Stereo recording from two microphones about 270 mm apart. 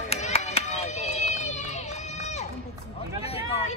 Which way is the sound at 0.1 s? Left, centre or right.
Left.